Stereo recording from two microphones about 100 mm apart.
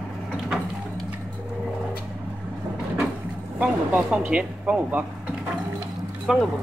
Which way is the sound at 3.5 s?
15° right (ahead or behind).